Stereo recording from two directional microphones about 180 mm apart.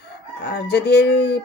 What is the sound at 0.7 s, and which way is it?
Speech, 65° left (ahead or behind).